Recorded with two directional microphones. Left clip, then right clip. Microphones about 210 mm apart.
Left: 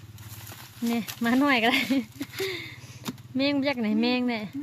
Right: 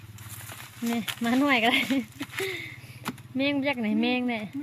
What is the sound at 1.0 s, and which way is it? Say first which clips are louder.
Speech: left 1 dB; 5° left (ahead or behind).